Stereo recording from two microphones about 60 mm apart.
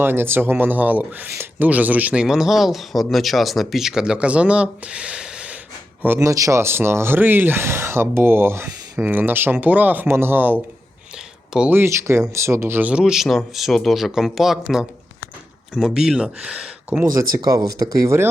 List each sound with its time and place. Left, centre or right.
0.0 s speech: right
2.2 s speech: centre
6.1 s speech: right
6.6 s speech: right
10.1 s speech: right
11.7 s speech: right
12.8 s speech: centre
13.2 s speech: centre
15.7 s speech: centre
17.2 s speech: right